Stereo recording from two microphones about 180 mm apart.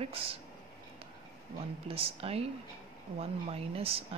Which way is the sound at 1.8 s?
30° right (ahead or behind).